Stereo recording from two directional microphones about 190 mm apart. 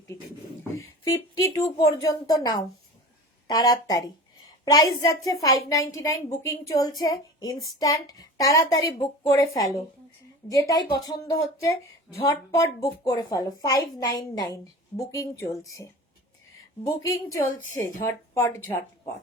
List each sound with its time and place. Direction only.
1.1 s a woman's voice: 15° left (ahead or behind)